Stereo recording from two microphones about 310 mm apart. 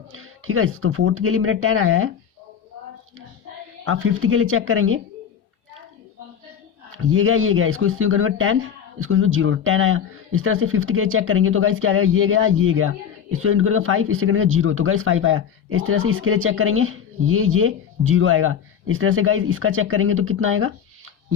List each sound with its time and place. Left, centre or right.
0.1 s speech: right
3.8 s speech: right
6.9 s speech: right